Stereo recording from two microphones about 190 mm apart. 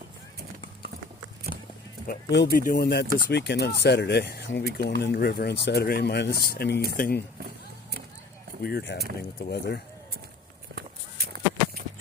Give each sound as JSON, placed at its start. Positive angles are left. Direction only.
{"t": 2.0, "sound": "speech", "side_deg": 60}
{"t": 8.6, "sound": "speech", "side_deg": 60}
{"t": 10.8, "sound": "a sound", "side_deg": -55}